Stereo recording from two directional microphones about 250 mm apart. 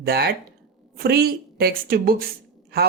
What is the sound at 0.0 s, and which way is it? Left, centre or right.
Speech, right.